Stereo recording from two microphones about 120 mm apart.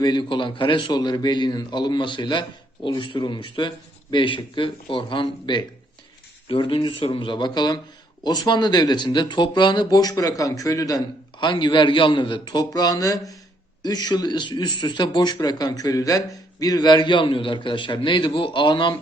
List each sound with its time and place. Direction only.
0.0 s a man's voice: 40° left (ahead or behind)
11.3 s a man's voice: 40° left (ahead or behind)